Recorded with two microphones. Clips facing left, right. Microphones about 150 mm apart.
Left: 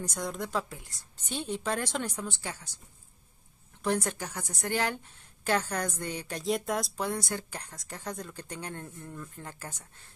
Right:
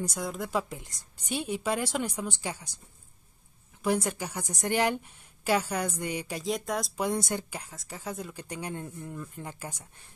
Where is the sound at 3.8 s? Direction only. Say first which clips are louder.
Right 2 dB; 10° right (ahead or behind).